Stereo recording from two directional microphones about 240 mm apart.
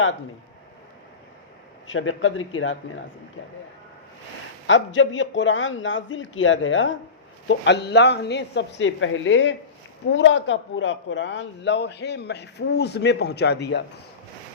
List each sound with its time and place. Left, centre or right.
1.9 s a man's voice: left
4.6 s a man's voice: left